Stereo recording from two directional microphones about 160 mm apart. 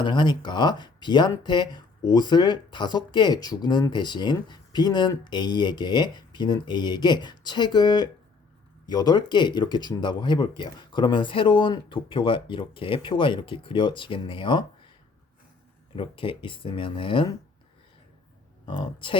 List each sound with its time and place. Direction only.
0.0 s speech: 30° left (ahead or behind)
16.0 s speech: 35° left (ahead or behind)
18.6 s speech: 30° left (ahead or behind)